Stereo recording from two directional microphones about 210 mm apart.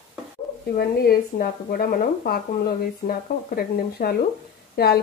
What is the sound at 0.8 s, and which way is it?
A woman's voice, 45° left (ahead or behind).